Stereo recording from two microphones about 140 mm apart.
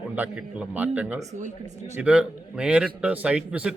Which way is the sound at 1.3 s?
60° right (ahead or behind).